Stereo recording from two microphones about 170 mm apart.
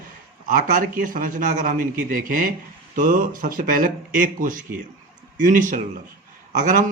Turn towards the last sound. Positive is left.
turn(degrees=-50)  # may be behind; listen again after turning